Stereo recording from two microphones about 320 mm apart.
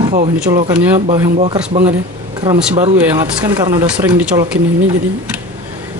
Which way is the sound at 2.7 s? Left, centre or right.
Centre.